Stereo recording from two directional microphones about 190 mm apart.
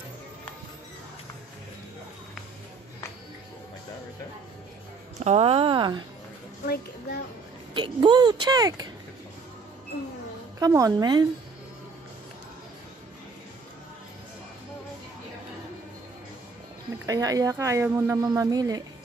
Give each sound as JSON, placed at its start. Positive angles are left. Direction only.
{"t": 5.2, "sound": "a woman's voice", "side_deg": -35}
{"t": 6.6, "sound": "a child's voice", "side_deg": 55}
{"t": 7.7, "sound": "a woman's voice", "side_deg": -25}
{"t": 10.6, "sound": "a woman's voice", "side_deg": -20}
{"t": 17.0, "sound": "speech", "side_deg": -20}